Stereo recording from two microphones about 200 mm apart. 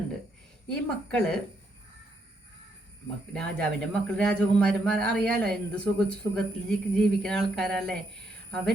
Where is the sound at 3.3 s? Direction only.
5° left (ahead or behind).